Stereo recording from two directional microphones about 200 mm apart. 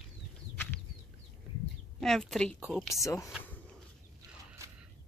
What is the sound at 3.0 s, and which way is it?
Speech, 15° left (ahead or behind).